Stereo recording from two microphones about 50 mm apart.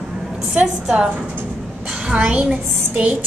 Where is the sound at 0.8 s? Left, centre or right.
Centre.